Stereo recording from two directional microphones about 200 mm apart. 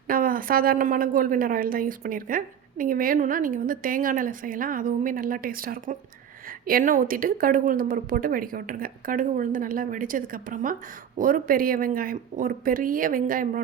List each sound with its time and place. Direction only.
0.1 s a woman's voice: 45° right (ahead or behind)